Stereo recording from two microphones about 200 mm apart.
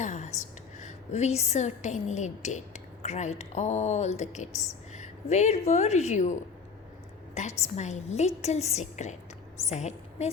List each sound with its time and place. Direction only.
0.0 s a sound: 35° left (ahead or behind)
0.8 s a woman's voice: 35° left (ahead or behind)
7.6 s a woman's voice: 35° left (ahead or behind)